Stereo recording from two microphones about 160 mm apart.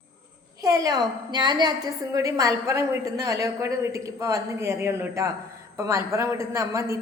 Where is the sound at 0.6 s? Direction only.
20° right (ahead or behind).